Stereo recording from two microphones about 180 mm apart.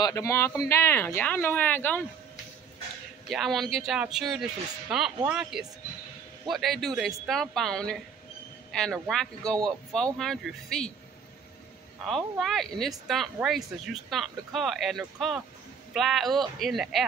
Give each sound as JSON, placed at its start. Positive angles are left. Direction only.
{"t": 0.0, "sound": "speech", "side_deg": 15}
{"t": 3.3, "sound": "speech", "side_deg": 0}
{"t": 12.0, "sound": "speech", "side_deg": 0}